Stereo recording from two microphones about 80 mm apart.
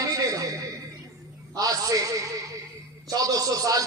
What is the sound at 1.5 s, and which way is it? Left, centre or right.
Speech, right.